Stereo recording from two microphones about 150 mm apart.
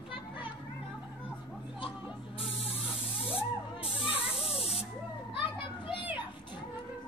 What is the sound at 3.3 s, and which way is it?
Spray, 40° left (ahead or behind).